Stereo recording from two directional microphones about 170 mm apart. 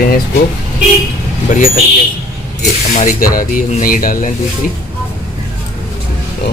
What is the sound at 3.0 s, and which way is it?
Speech, 55° left (ahead or behind).